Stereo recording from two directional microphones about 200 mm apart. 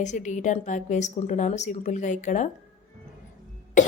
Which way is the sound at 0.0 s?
35° left (ahead or behind).